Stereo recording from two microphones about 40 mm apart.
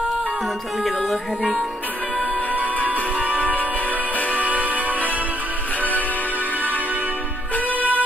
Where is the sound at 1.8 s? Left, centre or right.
Right.